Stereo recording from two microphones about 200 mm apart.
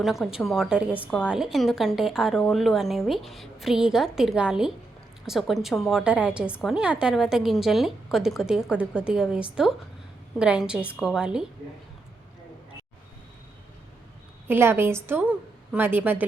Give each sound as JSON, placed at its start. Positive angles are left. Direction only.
{"t": 0.0, "sound": "a woman's voice", "side_deg": 0}
{"t": 1.0, "sound": "a woman's voice", "side_deg": 10}
{"t": 1.3, "sound": "a woman's voice", "side_deg": 0}
{"t": 14.4, "sound": "a woman's voice", "side_deg": -10}